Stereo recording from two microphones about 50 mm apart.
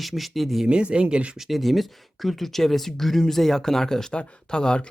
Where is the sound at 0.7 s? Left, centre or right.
Right.